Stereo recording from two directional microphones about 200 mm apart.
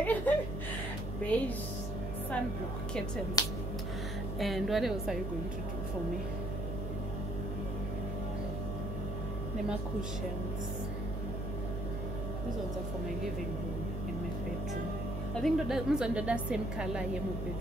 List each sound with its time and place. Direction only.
0.0 s music: 10° left (ahead or behind)
1.3 s a woman's voice: 5° left (ahead or behind)
3.4 s speech: 20° left (ahead or behind)
4.4 s a woman's voice: centre (ahead or behind)
15.4 s a woman's voice: centre (ahead or behind)